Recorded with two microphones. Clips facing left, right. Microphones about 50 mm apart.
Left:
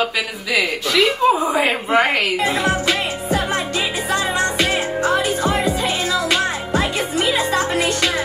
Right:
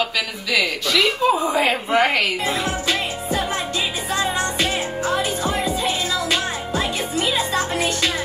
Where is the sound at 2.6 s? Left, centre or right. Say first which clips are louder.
Left 4 dB; left.